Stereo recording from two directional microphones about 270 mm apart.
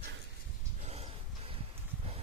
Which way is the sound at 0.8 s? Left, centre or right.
Right.